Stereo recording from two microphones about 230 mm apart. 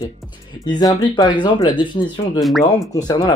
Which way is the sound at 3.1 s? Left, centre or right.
Centre.